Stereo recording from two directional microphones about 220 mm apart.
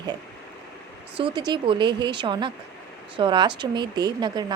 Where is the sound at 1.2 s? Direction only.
20° right (ahead or behind).